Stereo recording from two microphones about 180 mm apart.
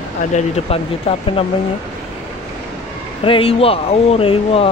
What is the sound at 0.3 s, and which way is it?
Speech, 35° left (ahead or behind).